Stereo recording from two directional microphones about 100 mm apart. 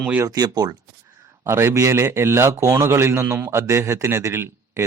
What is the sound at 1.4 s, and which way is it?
A man's voice, 30° right (ahead or behind).